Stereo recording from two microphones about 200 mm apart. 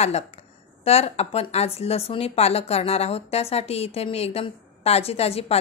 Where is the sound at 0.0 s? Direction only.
30° left (ahead or behind).